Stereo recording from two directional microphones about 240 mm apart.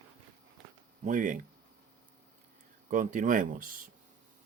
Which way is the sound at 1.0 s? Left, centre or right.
Right.